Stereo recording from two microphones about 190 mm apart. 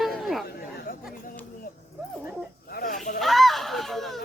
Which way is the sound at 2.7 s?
45° left (ahead or behind).